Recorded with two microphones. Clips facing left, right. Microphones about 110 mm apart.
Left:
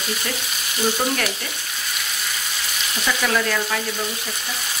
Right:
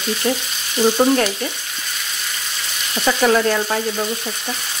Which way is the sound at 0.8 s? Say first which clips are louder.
Right 7 dB; 30° right (ahead or behind).